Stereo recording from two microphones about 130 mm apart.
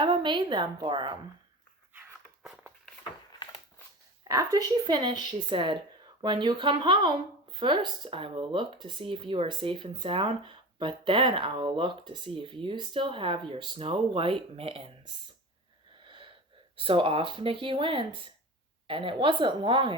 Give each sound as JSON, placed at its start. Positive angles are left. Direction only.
{"t": 0.0, "sound": "speech", "side_deg": -40}
{"t": 1.9, "sound": "dog", "side_deg": -15}
{"t": 4.2, "sound": "speech", "side_deg": -30}
{"t": 16.0, "sound": "wheeze", "side_deg": -40}
{"t": 16.7, "sound": "speech", "side_deg": -45}